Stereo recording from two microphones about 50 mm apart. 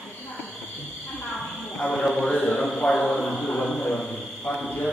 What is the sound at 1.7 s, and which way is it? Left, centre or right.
A man's voice, left.